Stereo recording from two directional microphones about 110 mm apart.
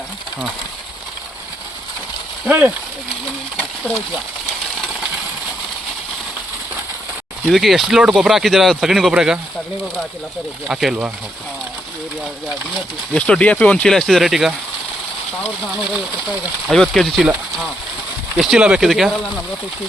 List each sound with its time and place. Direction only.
2.5 s speech: 15° right (ahead or behind)
7.4 s speech: centre (ahead or behind)
10.7 s speech: 5° right (ahead or behind)
13.1 s speech: 10° left (ahead or behind)
15.6 s speech: 5° right (ahead or behind)
18.3 s speech: 5° right (ahead or behind)